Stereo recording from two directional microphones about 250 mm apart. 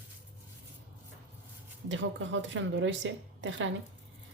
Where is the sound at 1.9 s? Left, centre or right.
Right.